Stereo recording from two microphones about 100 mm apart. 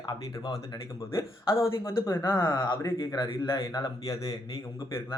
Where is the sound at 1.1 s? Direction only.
30° left (ahead or behind).